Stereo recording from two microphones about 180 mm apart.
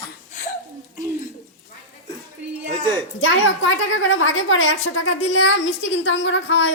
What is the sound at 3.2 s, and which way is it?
A woman's voice, 90° left.